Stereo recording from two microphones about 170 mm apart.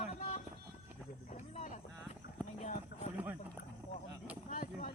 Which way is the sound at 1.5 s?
45° left (ahead or behind).